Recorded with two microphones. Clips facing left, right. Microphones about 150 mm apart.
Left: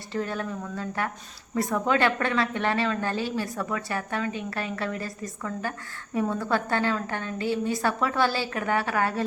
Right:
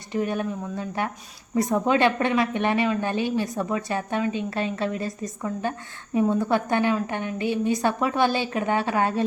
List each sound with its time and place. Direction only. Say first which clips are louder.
0.1 s a woman's voice: right 4 dB; 15° right (ahead or behind)